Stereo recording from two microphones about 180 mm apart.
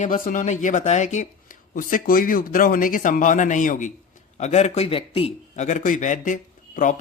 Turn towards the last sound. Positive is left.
turn(degrees=45)  # may be behind; listen again after turning